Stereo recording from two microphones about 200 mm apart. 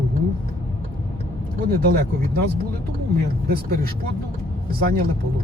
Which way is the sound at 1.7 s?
50° right (ahead or behind).